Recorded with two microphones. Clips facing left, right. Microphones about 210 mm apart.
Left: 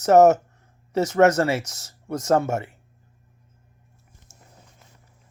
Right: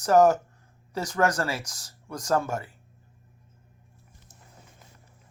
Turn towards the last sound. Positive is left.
turn(degrees=25)  # may be behind; listen again after turning